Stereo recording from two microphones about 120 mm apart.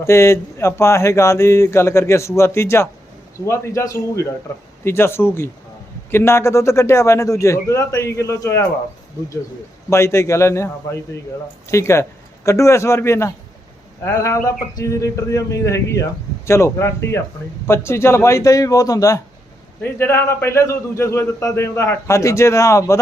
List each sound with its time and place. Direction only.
0.0 s a man's voice: 25° left (ahead or behind)
9.9 s a man's voice: 25° left (ahead or behind)